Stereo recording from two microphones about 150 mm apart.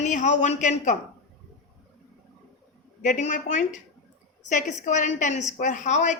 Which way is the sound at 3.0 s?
55° left (ahead or behind).